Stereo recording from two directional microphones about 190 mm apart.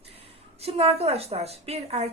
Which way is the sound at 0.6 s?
30° right (ahead or behind).